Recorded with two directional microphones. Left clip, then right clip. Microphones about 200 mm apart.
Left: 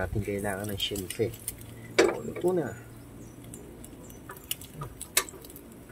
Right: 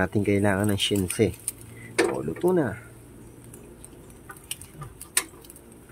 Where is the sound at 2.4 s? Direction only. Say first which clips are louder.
Right 5 dB; 50° right (ahead or behind).